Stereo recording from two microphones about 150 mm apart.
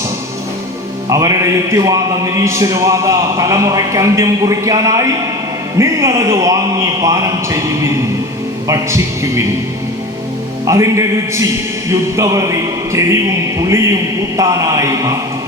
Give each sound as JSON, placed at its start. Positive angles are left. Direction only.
{"t": 1.1, "sound": "a man's voice", "side_deg": -20}
{"t": 10.7, "sound": "a man's voice", "side_deg": -20}